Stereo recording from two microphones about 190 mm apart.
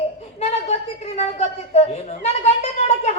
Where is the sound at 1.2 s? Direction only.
35° left (ahead or behind).